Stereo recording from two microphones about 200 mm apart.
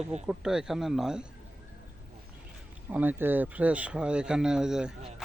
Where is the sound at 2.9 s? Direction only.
10° right (ahead or behind).